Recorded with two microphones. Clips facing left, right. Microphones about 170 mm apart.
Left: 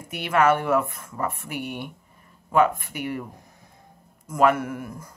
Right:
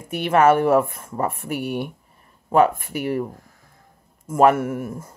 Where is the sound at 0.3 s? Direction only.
30° right (ahead or behind).